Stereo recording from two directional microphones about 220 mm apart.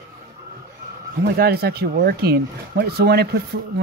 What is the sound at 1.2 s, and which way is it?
Speech, 45° right (ahead or behind).